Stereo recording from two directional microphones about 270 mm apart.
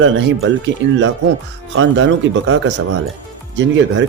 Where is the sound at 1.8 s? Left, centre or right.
Right.